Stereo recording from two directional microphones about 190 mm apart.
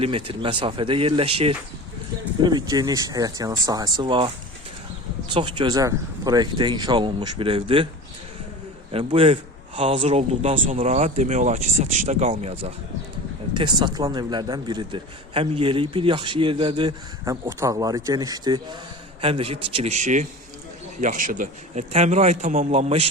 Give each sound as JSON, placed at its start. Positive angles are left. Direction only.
{"t": 0.0, "sound": "a man's voice", "side_deg": -30}
{"t": 5.3, "sound": "a man's voice", "side_deg": -25}
{"t": 8.9, "sound": "a man's voice", "side_deg": -30}